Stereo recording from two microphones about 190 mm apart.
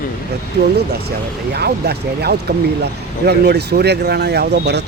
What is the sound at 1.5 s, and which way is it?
Speech, 60° right (ahead or behind).